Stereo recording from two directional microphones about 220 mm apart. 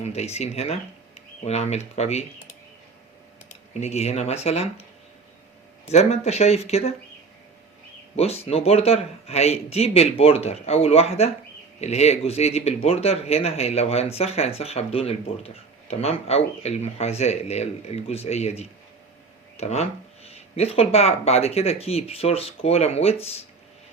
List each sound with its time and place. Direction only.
0.0 s speech: 30° left (ahead or behind)
3.8 s speech: 30° left (ahead or behind)
5.9 s speech: 30° left (ahead or behind)
8.1 s speech: 30° left (ahead or behind)